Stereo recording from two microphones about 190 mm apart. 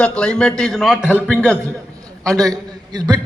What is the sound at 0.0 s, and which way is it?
A man's voice, 5° left (ahead or behind).